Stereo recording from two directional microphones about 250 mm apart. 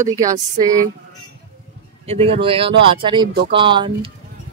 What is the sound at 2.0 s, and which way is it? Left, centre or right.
Speech, right.